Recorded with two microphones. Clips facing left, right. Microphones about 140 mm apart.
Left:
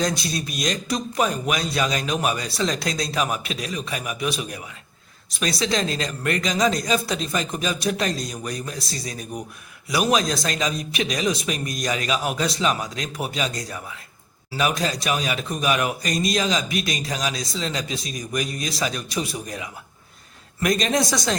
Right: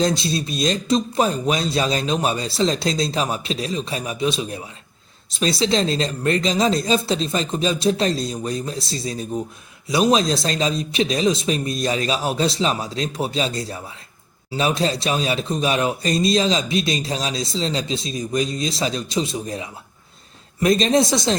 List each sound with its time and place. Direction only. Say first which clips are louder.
0.0 s speech: right 4 dB; 25° right (ahead or behind)